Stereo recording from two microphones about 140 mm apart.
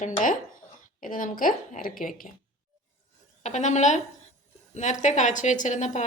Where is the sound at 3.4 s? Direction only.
55° left (ahead or behind).